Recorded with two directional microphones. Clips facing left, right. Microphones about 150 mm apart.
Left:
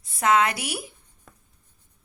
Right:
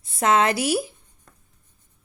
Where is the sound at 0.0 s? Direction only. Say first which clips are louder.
Right 1 dB; 30° right (ahead or behind).